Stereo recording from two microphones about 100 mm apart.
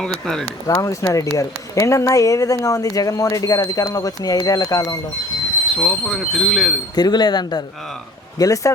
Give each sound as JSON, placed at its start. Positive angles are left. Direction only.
{"t": 0.0, "sound": "speech", "side_deg": 5}
{"t": 0.7, "sound": "speech", "side_deg": 35}
{"t": 5.8, "sound": "speech", "side_deg": 0}
{"t": 6.9, "sound": "speech", "side_deg": 45}